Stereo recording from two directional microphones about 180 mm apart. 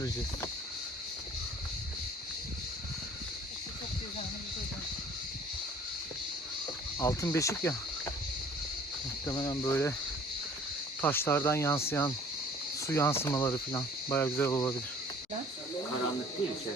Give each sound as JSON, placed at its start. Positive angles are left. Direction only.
{"t": 7.0, "sound": "speech", "side_deg": 15}
{"t": 9.2, "sound": "speech", "side_deg": 20}
{"t": 11.0, "sound": "speech", "side_deg": 10}